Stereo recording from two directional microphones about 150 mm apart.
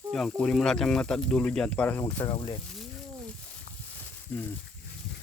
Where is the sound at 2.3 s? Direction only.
35° left (ahead or behind).